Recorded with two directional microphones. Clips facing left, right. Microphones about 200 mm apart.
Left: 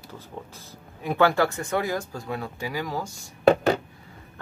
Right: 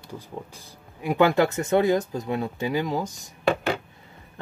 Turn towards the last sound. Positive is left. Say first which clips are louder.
# left 5 dB
turn(degrees=40)  # may be behind; listen again after turning